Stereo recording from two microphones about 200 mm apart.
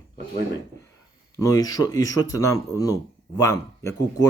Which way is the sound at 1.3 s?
20° left (ahead or behind).